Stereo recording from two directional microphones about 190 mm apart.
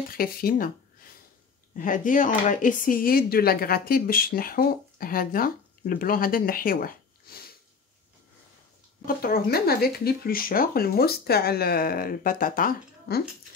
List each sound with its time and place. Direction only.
0.1 s speech: 50° left (ahead or behind)
1.8 s speech: 45° left (ahead or behind)
9.0 s speech: 50° left (ahead or behind)